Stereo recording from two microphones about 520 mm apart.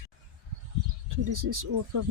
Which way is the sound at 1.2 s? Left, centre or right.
Right.